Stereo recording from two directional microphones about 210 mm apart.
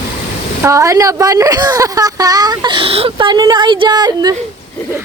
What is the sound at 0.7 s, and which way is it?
Speech, 15° right (ahead or behind).